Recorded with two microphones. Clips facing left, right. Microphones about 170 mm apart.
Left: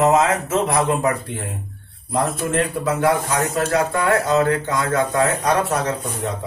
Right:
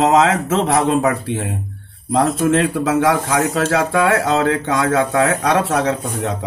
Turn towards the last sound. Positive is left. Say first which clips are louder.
# right 4 dB
turn(degrees=-75)  # may be behind; listen again after turning